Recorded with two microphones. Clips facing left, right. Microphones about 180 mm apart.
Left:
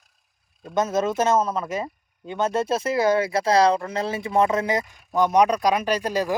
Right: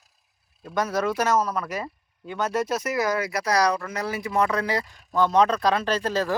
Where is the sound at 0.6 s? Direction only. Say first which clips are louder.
Left 3 dB; 25° left (ahead or behind).